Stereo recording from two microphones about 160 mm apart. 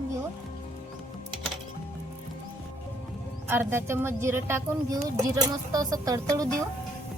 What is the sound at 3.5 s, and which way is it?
Speech, 15° right (ahead or behind).